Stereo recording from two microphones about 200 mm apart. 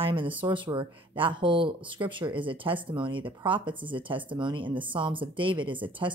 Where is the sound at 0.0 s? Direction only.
25° right (ahead or behind).